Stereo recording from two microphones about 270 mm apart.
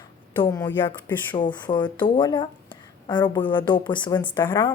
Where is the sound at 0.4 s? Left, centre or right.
Centre.